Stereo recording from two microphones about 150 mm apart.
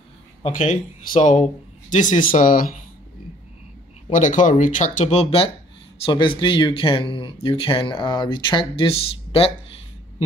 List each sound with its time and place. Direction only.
0.4 s speech: 55° left (ahead or behind)
4.1 s speech: 60° left (ahead or behind); by 5.5 s 45° left (ahead or behind)
6.0 s speech: 35° left (ahead or behind)